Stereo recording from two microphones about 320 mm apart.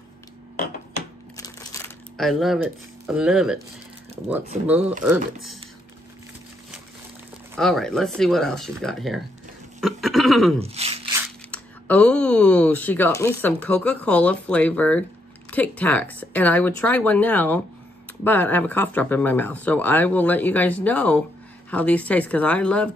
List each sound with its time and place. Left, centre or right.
1.3 s crumpling: centre
4.6 s speech: centre
7.5 s speech: centre
9.8 s goat: centre
10.6 s speech: centre
11.2 s speech: centre